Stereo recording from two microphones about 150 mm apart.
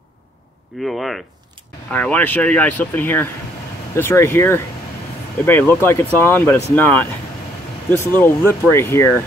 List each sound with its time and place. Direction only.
0.8 s speech: centre (ahead or behind)
8.2 s speech: 15° left (ahead or behind)